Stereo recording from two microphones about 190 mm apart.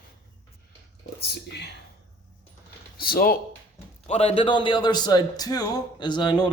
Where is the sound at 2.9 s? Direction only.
50° left (ahead or behind).